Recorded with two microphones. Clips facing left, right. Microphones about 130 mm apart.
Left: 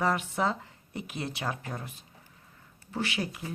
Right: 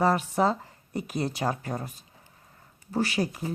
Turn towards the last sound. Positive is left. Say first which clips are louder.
# right 5 dB
turn(degrees=-40)  # may be behind; listen again after turning